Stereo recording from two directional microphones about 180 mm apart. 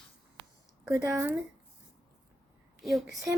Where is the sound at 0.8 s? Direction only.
10° right (ahead or behind).